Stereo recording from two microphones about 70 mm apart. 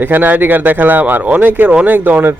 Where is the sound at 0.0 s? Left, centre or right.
Right.